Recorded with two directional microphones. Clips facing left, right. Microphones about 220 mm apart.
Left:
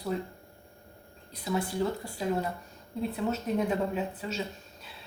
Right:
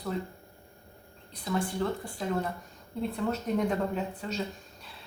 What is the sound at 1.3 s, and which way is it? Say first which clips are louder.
Speech: even; 5° left (ahead or behind).